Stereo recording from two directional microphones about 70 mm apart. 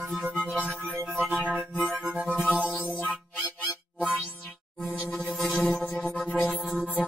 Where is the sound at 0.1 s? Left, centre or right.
Right.